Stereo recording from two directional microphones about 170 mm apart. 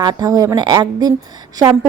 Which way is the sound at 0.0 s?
25° right (ahead or behind).